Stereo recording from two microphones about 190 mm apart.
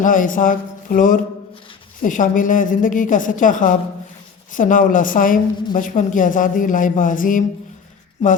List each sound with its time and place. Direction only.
0.0 s a woman's voice: 45° left (ahead or behind)